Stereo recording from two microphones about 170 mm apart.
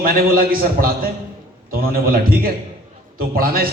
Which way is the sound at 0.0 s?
60° right (ahead or behind).